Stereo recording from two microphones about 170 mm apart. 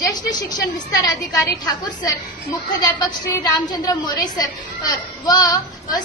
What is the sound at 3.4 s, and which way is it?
A woman's voice, 20° left (ahead or behind).